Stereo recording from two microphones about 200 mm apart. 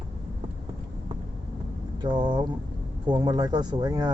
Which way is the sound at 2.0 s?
25° right (ahead or behind).